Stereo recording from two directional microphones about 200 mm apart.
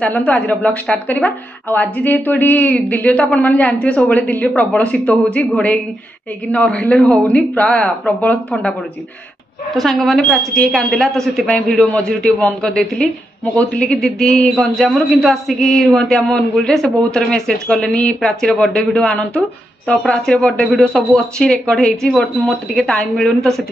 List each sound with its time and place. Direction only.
0.0 s a woman's voice: 5° left (ahead or behind)
9.8 s a man's voice: centre (ahead or behind)